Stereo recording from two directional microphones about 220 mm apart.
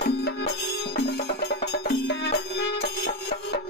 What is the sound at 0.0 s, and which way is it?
Music, 45° left (ahead or behind).